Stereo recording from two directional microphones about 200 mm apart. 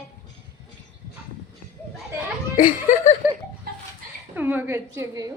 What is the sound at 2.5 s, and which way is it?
Speech, 40° left (ahead or behind).